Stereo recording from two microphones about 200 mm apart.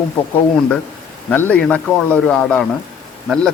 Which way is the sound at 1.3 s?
10° left (ahead or behind).